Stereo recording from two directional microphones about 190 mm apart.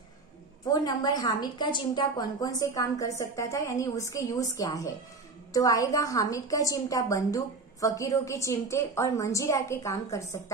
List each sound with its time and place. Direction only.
0.7 s a woman's voice: 20° left (ahead or behind)